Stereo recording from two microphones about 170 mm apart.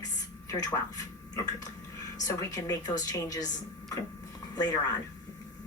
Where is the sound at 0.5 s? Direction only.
20° left (ahead or behind).